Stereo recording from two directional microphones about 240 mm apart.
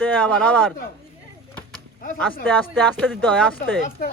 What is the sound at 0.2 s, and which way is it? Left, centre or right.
Speech, centre.